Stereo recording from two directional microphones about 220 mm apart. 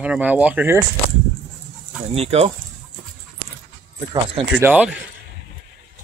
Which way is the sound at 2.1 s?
30° right (ahead or behind).